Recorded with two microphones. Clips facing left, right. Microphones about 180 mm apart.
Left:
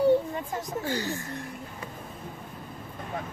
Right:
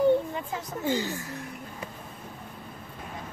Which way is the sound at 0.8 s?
15° right (ahead or behind).